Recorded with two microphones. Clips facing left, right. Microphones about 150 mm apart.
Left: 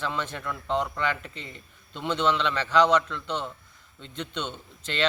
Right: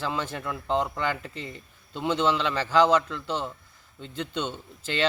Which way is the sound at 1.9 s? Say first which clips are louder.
Right 1 dB; 10° right (ahead or behind).